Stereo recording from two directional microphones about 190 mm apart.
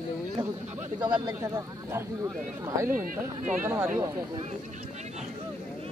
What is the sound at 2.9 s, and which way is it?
Speech, 45° right (ahead or behind).